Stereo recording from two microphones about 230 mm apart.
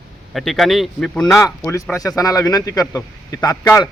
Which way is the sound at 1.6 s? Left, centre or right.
Centre.